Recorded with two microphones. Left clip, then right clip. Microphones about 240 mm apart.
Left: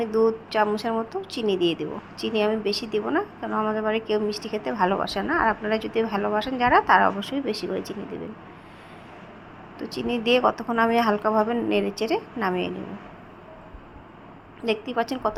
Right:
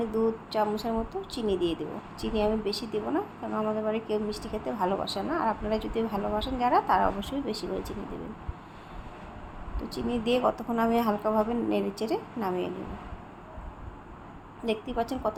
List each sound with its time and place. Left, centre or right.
0.2 s a woman's voice: centre
9.7 s a woman's voice: centre
14.6 s a woman's voice: centre